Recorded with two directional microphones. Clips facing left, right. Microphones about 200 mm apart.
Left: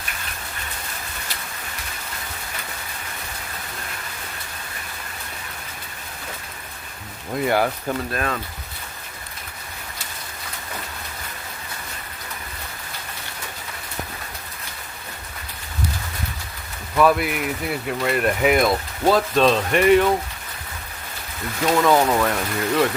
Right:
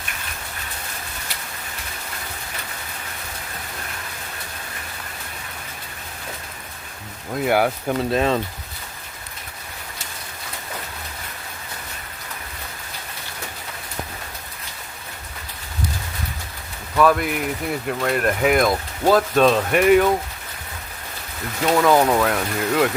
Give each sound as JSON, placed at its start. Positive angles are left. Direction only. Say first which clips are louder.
{"t": 7.3, "sound": "speech", "louder": "right 1 dB", "side_deg": -5}
{"t": 8.1, "sound": "speech", "louder": "right 6 dB", "side_deg": -25}
{"t": 17.0, "sound": "speech", "louder": "even", "side_deg": 5}
{"t": 21.8, "sound": "speech", "louder": "right 2 dB", "side_deg": -5}